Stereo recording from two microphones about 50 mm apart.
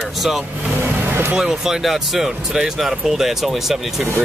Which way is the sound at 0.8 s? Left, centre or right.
Right.